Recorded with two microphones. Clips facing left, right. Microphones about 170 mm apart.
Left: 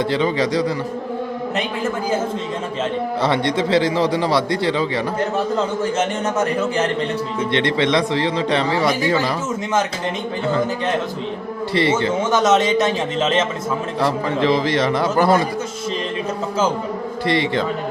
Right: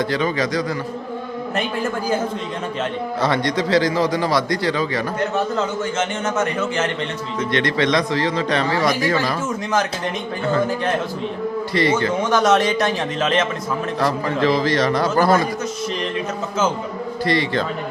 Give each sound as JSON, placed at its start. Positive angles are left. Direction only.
{"t": 0.0, "sound": "speech", "side_deg": 25}
{"t": 3.2, "sound": "a man's voice", "side_deg": 25}
{"t": 7.5, "sound": "speech", "side_deg": 25}
{"t": 11.7, "sound": "speech", "side_deg": 25}
{"t": 17.2, "sound": "speech", "side_deg": 20}